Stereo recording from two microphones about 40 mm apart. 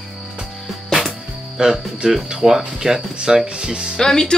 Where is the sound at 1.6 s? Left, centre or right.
Centre.